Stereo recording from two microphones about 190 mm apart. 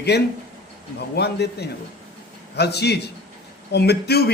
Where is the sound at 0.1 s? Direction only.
60° left (ahead or behind).